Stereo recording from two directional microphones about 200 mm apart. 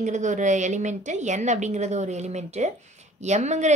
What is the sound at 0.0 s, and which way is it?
A woman's voice, 35° right (ahead or behind).